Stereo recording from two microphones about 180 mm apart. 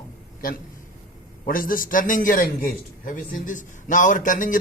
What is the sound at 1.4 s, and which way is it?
A man's voice, 50° left (ahead or behind).